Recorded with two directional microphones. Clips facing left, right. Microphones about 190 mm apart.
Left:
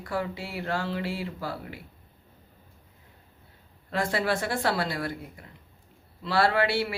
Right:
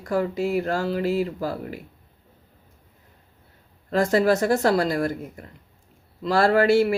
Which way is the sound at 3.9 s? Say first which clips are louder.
Right 8 dB; 45° right (ahead or behind).